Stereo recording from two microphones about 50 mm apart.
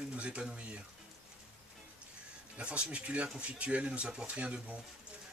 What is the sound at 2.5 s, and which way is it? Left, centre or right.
Speech, right.